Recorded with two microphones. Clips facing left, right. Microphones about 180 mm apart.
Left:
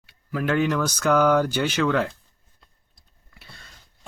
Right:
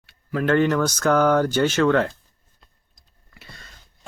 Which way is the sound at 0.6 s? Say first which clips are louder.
Right 3 dB; 10° left (ahead or behind).